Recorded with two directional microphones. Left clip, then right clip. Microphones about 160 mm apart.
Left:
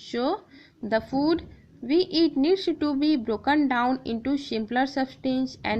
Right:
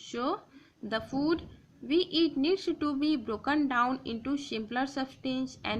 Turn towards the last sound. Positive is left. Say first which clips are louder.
# left 7 dB
turn(degrees=30)  # may be behind; listen again after turning